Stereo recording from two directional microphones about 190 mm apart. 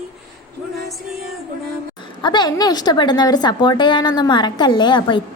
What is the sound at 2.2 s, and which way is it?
A woman's voice, 20° left (ahead or behind).